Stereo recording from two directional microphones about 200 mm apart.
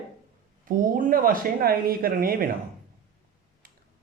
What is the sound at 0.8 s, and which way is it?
Speech, 45° right (ahead or behind).